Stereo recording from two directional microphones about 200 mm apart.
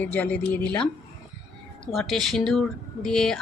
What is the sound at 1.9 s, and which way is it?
Speech, centre (ahead or behind).